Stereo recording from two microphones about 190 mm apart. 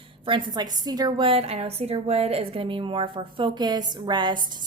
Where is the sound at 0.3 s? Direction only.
25° right (ahead or behind).